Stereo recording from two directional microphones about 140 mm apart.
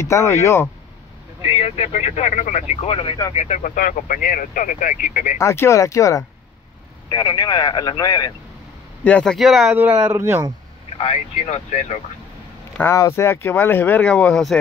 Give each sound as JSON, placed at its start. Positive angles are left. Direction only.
{"t": 0.1, "sound": "speech", "side_deg": 20}
{"t": 1.4, "sound": "speech", "side_deg": 45}
{"t": 3.3, "sound": "speech", "side_deg": 60}
{"t": 5.4, "sound": "speech", "side_deg": 20}
{"t": 9.0, "sound": "speech", "side_deg": 5}
{"t": 9.8, "sound": "speech", "side_deg": -10}
{"t": 11.0, "sound": "speech", "side_deg": 45}
{"t": 12.9, "sound": "speech", "side_deg": 20}